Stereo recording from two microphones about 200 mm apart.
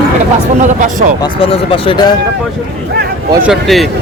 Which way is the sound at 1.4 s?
25° left (ahead or behind).